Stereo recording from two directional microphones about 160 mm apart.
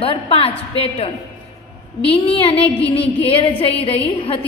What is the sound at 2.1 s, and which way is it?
Speech, 35° left (ahead or behind).